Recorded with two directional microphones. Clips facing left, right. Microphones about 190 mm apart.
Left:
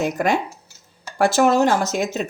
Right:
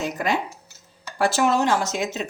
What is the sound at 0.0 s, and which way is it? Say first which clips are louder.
A woman's voice: left 4 dB; 50° left (ahead or behind).